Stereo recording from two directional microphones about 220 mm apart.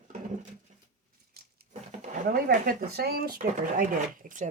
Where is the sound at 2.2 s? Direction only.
40° right (ahead or behind).